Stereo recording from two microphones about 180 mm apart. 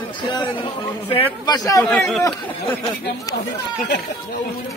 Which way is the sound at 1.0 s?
30° left (ahead or behind).